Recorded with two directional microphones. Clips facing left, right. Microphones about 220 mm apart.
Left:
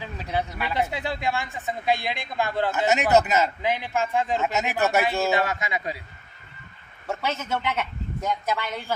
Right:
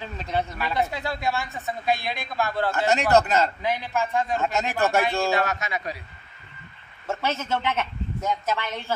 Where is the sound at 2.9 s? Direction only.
5° left (ahead or behind).